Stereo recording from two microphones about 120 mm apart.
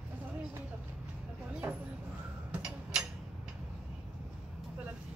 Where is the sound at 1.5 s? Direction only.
10° right (ahead or behind).